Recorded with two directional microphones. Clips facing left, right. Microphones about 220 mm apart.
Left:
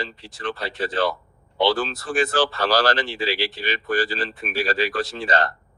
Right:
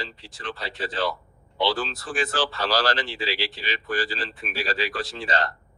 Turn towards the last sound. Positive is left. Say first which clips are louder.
# left 4 dB
turn(degrees=55)  # may be behind; listen again after turning